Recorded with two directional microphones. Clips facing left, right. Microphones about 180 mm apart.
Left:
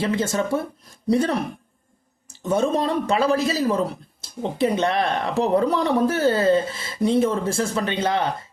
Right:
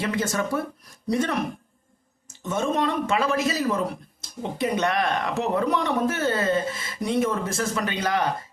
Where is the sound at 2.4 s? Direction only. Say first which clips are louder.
Left 4 dB; 35° left (ahead or behind).